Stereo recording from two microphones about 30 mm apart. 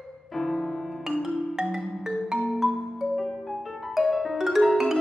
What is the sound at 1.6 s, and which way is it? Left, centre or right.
Music, right.